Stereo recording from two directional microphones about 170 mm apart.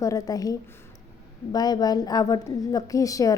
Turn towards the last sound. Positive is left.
turn(degrees=20)  # may be behind; listen again after turning